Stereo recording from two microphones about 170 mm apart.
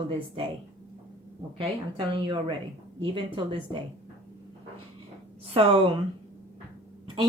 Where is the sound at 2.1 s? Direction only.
30° right (ahead or behind).